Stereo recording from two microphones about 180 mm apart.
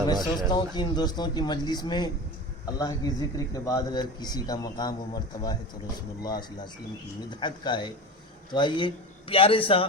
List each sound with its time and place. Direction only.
0.3 s a man's voice: 25° left (ahead or behind)